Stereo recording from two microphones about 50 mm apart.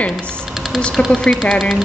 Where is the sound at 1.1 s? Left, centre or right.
Centre.